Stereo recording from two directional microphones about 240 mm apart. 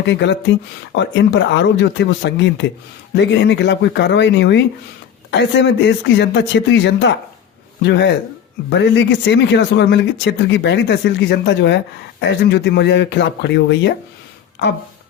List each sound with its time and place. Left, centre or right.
0.0 s speech: left